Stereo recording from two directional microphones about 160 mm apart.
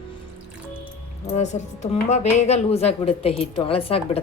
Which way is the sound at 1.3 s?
45° left (ahead or behind).